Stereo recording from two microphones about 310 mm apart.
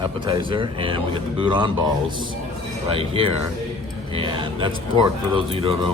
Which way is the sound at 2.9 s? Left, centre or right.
Centre.